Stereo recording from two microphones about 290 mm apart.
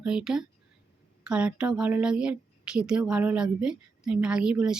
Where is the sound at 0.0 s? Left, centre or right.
Centre.